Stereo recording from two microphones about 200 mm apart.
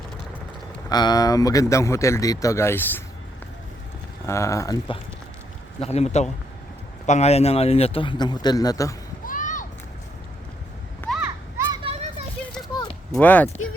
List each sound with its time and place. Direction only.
0.9 s speech: 20° left (ahead or behind)
4.3 s speech: 15° left (ahead or behind)
5.8 s a man's voice: 30° left (ahead or behind)
9.2 s a sound: 40° left (ahead or behind)
11.1 s children playing: 5° right (ahead or behind)
11.7 s children playing: 25° right (ahead or behind)
12.6 s a sound: 20° left (ahead or behind)
13.1 s speech: 10° left (ahead or behind)